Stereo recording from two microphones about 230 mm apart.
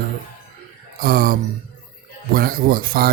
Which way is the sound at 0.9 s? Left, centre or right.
Right.